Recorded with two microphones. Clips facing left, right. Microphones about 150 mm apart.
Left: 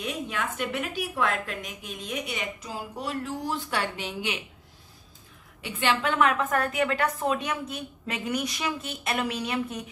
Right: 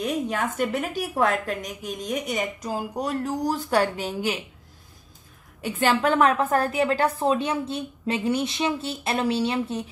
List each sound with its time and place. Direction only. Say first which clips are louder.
0.0 s a woman's voice: right 6 dB; 40° right (ahead or behind)
5.6 s a woman's voice: right 5 dB; 45° right (ahead or behind)